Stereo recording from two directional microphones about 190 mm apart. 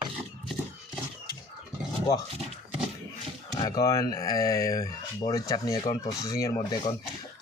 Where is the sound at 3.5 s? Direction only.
20° left (ahead or behind).